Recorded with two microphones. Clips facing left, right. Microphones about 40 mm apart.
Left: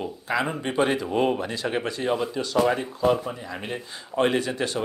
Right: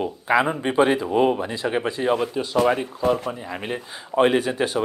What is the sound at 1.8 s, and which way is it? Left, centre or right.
Speech, centre.